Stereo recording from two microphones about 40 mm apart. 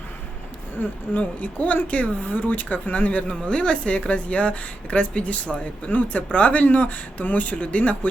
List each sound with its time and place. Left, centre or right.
0.8 s speech: left
3.4 s speech: left